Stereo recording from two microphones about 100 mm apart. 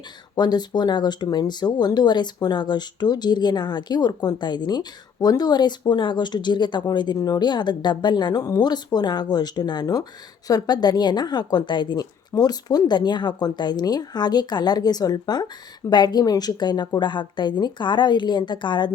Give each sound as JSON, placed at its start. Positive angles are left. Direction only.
{"t": 0.3, "sound": "speech", "side_deg": 45}